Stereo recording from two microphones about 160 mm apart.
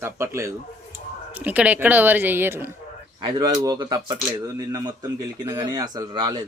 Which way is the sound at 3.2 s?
25° right (ahead or behind).